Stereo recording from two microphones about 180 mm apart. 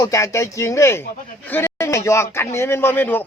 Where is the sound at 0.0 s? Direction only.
15° left (ahead or behind).